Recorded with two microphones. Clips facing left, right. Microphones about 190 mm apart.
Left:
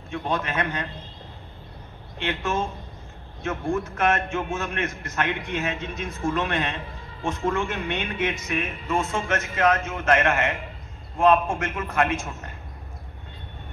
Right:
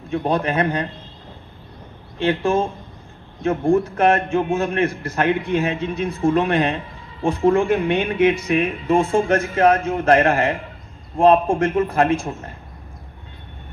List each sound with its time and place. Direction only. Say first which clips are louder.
0.1 s a man's voice: right 7 dB; 35° right (ahead or behind)
2.1 s a man's voice: right 8 dB; 30° right (ahead or behind)